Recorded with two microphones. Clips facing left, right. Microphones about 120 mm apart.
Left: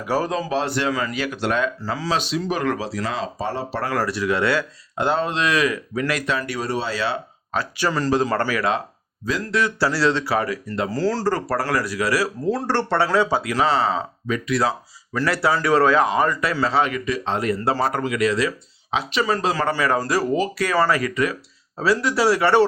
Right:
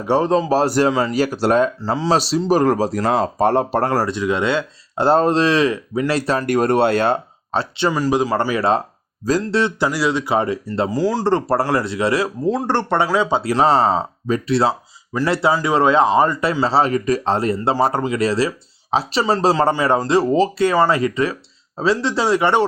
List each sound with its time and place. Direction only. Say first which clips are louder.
0.0 s speech: right 6 dB; 30° right (ahead or behind)
0.9 s speech: right 6 dB; 30° right (ahead or behind)
1.8 s speech: right 6 dB; 30° right (ahead or behind); by 3.9 s 45° right (ahead or behind)
3.9 s a man's voice: right 3 dB; 20° right (ahead or behind)
4.9 s speech: right 7 dB; 40° right (ahead or behind)
6.4 s speech: right 10 dB; 50° right (ahead or behind)
7.5 s a man's voice: right 4 dB; 30° right (ahead or behind)
7.9 s a man's voice: right 2 dB; 15° right (ahead or behind)
10.3 s a man's voice: right 4 dB; 25° right (ahead or behind)
11.3 s a man's voice: right 5 dB; 25° right (ahead or behind)
13.4 s a man's voice: right 5 dB; 35° right (ahead or behind)
19.7 s a man's voice: right 4 dB; 20° right (ahead or behind)